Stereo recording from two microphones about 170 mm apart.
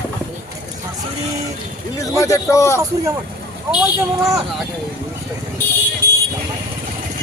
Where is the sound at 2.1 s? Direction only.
20° left (ahead or behind).